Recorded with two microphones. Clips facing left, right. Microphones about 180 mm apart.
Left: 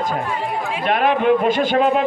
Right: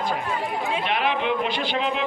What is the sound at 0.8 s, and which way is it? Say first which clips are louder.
A man's voice: left 10 dB; 50° left (ahead or behind).